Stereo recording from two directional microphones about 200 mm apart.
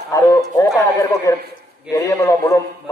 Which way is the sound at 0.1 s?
15° left (ahead or behind).